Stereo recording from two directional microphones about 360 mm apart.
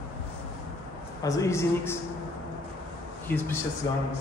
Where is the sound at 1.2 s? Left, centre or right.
Centre.